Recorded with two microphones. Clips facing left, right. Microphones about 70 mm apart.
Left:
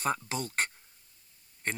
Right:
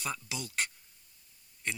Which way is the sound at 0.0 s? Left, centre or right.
Left.